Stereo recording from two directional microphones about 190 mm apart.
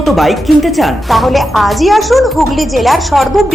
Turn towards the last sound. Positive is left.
turn(degrees=0)  # may be behind; listen again after turning